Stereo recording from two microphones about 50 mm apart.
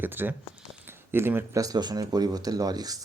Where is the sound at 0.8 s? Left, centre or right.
Right.